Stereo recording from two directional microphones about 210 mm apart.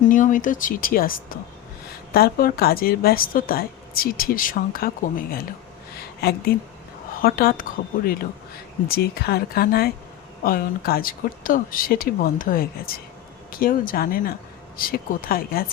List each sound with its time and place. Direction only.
0.1 s a woman's voice: 40° left (ahead or behind)
6.0 s a sound: 50° left (ahead or behind)
7.2 s a woman's voice: 45° left (ahead or behind)